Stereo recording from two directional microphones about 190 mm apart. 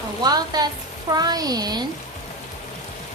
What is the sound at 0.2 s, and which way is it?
Speech, 20° right (ahead or behind).